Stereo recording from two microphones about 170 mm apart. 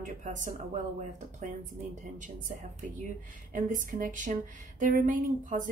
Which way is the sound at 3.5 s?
50° right (ahead or behind).